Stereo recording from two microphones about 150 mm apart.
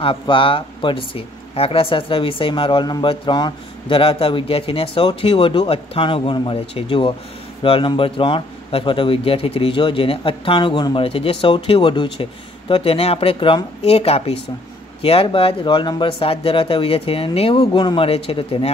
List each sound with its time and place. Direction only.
0.0 s speech: 35° left (ahead or behind)